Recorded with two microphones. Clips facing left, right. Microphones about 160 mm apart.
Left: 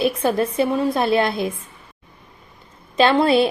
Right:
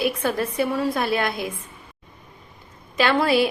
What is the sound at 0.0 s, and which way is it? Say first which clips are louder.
A woman's voice: left 4 dB; 20° left (ahead or behind).